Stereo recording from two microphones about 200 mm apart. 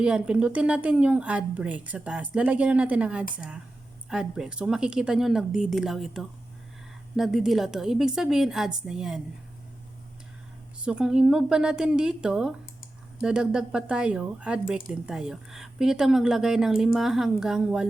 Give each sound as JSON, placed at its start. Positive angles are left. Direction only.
{"t": 0.0, "sound": "a woman's voice", "side_deg": -5}
{"t": 10.8, "sound": "a woman's voice", "side_deg": -5}